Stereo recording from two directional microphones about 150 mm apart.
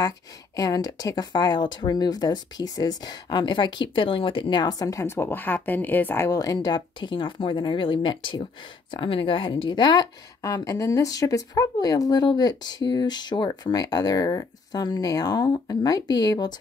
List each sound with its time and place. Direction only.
0.6 s speech: 25° left (ahead or behind)